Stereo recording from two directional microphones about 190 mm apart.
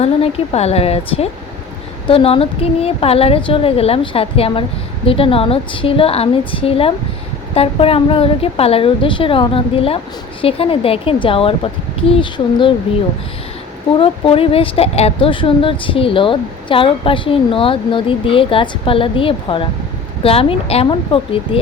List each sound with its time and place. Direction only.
0.0 s a woman's voice: 30° left (ahead or behind)
14.0 s speech: 30° left (ahead or behind)